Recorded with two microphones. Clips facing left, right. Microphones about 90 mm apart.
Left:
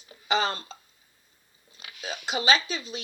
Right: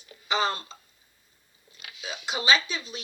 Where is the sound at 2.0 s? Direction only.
50° left (ahead or behind).